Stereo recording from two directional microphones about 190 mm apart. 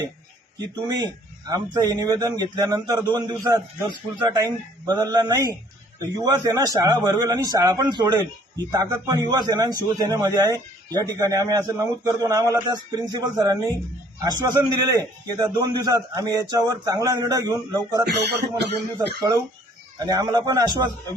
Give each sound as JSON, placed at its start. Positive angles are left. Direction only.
{"t": 0.6, "sound": "a man's voice", "side_deg": -20}
{"t": 20.0, "sound": "a man's voice", "side_deg": -20}